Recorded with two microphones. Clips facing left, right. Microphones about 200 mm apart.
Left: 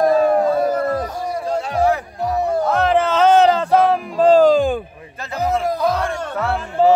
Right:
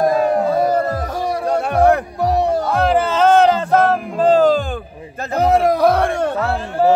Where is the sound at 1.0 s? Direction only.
80° right.